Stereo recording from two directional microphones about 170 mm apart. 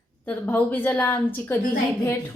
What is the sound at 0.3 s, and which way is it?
Speech, 10° left (ahead or behind).